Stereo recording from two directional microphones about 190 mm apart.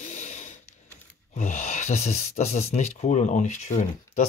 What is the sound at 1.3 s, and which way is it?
Speech, 40° left (ahead or behind).